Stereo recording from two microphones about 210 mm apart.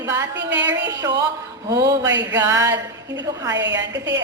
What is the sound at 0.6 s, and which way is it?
Speech, 60° right (ahead or behind).